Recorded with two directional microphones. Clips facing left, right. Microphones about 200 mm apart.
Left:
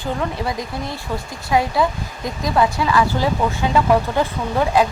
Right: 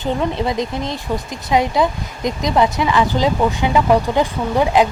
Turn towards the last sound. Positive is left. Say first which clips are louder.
# right 2 dB
turn(degrees=-20)  # may be behind; listen again after turning